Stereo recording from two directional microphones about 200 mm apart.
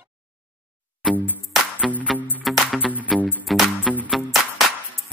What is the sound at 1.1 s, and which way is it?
Music, 5° left (ahead or behind).